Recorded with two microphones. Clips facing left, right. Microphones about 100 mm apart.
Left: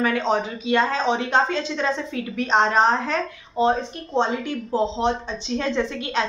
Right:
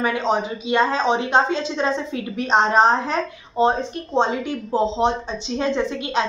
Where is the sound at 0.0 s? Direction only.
15° right (ahead or behind).